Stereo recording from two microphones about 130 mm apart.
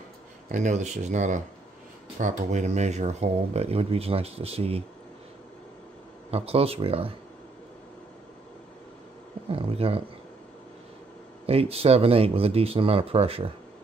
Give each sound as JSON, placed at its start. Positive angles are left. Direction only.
{"t": 0.5, "sound": "speech", "side_deg": -65}
{"t": 6.3, "sound": "speech", "side_deg": -50}
{"t": 9.5, "sound": "speech", "side_deg": -45}
{"t": 11.4, "sound": "speech", "side_deg": -50}